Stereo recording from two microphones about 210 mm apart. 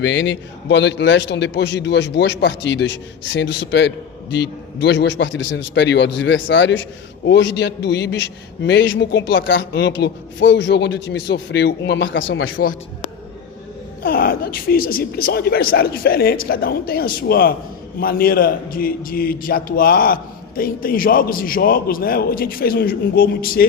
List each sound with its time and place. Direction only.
0.0 s a man's voice: 60° left (ahead or behind)
14.0 s speech: 45° left (ahead or behind)